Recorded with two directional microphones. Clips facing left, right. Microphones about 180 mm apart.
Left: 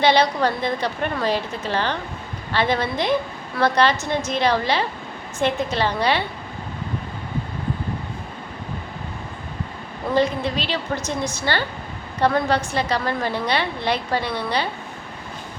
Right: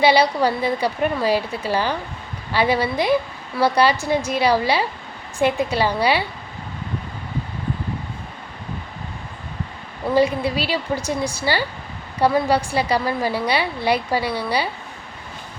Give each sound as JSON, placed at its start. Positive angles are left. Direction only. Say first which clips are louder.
{"t": 0.0, "sound": "a woman's voice", "louder": "right 2 dB", "side_deg": -10}
{"t": 10.2, "sound": "a woman's voice", "louder": "right 2 dB", "side_deg": -10}